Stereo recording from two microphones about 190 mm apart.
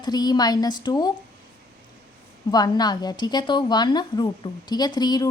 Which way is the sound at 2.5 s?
20° left (ahead or behind).